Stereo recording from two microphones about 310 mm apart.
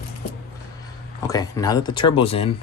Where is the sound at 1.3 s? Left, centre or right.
Centre.